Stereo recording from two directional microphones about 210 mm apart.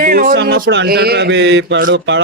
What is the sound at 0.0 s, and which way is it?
Speech, 40° right (ahead or behind).